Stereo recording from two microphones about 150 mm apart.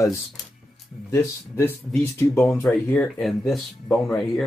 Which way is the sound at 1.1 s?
15° left (ahead or behind).